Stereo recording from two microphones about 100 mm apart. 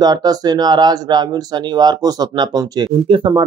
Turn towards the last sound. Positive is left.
turn(degrees=-65)  # may be behind; listen again after turning